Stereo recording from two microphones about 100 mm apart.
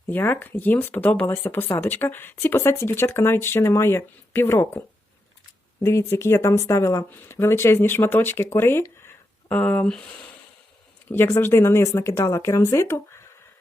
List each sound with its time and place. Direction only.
0.1 s speech: 20° left (ahead or behind)
5.8 s speech: 25° left (ahead or behind)
9.0 s a sound: 20° left (ahead or behind)
11.1 s speech: 20° left (ahead or behind)